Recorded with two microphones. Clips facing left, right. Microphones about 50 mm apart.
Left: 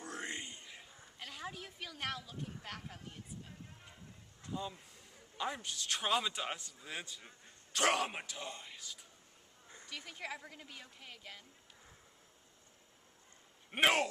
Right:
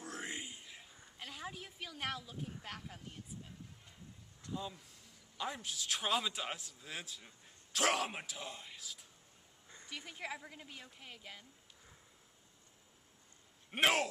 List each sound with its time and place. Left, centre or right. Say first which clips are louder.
0.0 s a sound: left 1 dB; centre
4.5 s a man's voice: left 1 dB; centre
13.7 s speech: left 1 dB; centre